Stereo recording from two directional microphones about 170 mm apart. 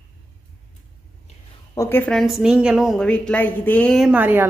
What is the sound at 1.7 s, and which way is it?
A woman's voice, 15° left (ahead or behind).